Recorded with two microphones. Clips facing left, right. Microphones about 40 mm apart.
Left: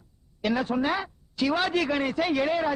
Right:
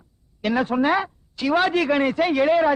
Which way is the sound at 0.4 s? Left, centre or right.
Right.